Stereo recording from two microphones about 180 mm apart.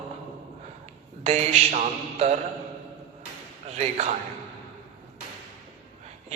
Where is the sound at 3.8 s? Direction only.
35° right (ahead or behind).